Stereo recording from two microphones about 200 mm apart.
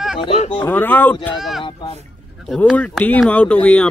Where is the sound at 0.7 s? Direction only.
10° left (ahead or behind).